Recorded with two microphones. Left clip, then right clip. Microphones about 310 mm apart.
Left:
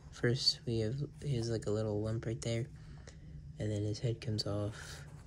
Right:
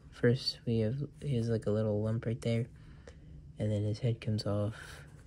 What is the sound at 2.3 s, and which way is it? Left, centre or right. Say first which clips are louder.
Speech: right 3 dB; right.